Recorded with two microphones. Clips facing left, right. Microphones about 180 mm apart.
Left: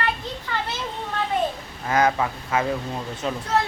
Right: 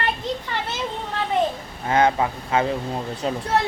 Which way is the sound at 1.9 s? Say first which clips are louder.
Right 2 dB; 25° right (ahead or behind).